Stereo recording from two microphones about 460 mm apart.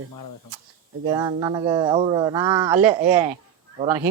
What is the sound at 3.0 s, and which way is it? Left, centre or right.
Speech, right.